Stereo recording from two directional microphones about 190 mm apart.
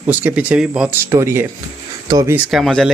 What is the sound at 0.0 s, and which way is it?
Speech, 10° right (ahead or behind).